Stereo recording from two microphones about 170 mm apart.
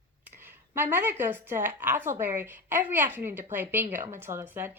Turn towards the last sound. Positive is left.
turn(degrees=-15)  # may be behind; listen again after turning